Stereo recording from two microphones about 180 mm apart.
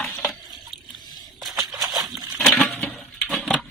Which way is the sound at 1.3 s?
Centre (ahead or behind).